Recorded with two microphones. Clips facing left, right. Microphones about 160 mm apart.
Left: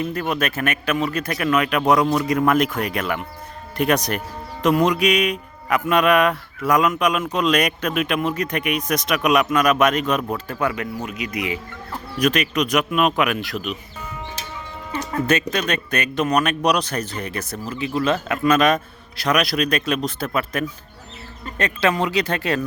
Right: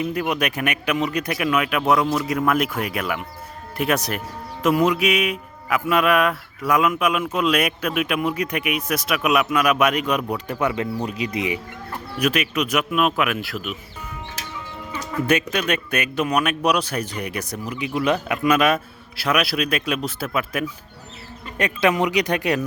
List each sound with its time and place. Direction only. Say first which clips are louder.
0.0 s speech: even; 10° right (ahead or behind)
12.2 s speech: left 2 dB; 5° right (ahead or behind)
15.3 s speech: right 1 dB; 10° right (ahead or behind)